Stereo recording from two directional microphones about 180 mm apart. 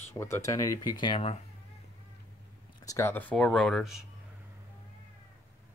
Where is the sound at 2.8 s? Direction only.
15° left (ahead or behind); by 4.0 s centre (ahead or behind).